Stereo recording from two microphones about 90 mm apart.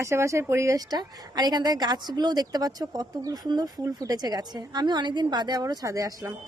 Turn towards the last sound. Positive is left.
turn(degrees=-40)  # may be behind; listen again after turning